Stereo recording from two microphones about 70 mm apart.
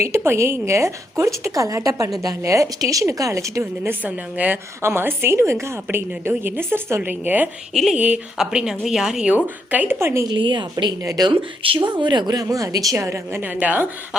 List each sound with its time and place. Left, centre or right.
0.3 s a woman's voice: right
1.5 s a woman's voice: right
3.8 s a woman's voice: right
4.8 s a woman's voice: right
7.7 s speech: centre
7.9 s a woman's voice: right
8.4 s a woman's voice: centre
9.3 s a woman's voice: right
10.0 s a woman's voice: right
10.2 s a woman's voice: right
11.0 s a woman's voice: right
11.8 s a woman's voice: right
13.4 s a woman's voice: right